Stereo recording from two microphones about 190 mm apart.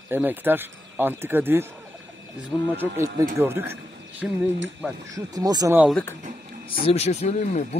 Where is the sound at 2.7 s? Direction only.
15° right (ahead or behind).